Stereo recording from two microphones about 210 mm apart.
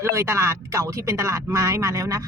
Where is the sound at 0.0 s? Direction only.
15° right (ahead or behind).